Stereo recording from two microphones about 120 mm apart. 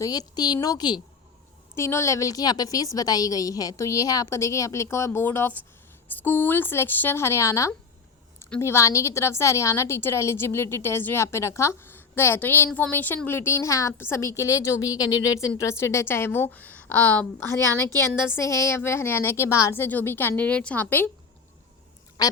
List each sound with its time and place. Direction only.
0.0 s a woman's voice: 30° left (ahead or behind)
1.7 s a woman's voice: 25° left (ahead or behind)
22.2 s speech: 35° left (ahead or behind)